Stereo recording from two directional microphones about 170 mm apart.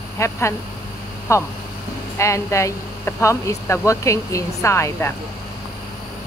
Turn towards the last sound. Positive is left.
turn(degrees=15)  # may be behind; listen again after turning